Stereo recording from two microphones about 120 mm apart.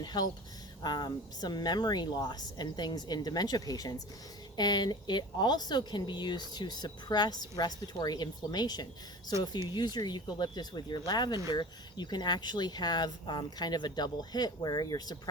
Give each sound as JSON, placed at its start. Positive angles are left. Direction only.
{"t": 0.0, "sound": "speech", "side_deg": 35}